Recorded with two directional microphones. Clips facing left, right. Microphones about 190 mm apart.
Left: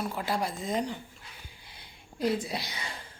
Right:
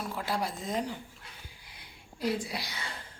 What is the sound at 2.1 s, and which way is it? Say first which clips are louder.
Speech: left 3 dB; 20° left (ahead or behind).